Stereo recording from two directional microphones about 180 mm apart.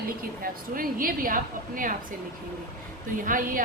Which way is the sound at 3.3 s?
50° right (ahead or behind).